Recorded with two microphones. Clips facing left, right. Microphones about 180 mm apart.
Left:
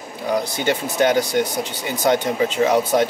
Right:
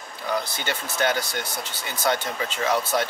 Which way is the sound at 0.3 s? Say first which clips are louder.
Left 7 dB; 10° left (ahead or behind).